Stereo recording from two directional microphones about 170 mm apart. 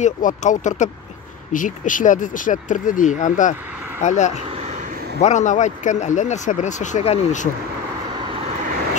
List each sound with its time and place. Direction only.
0.0 s speech: 45° left (ahead or behind)